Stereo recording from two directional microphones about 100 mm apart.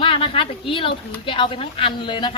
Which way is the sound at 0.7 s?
60° left (ahead or behind).